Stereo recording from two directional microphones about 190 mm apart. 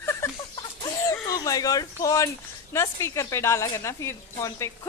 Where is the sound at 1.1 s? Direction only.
20° left (ahead or behind).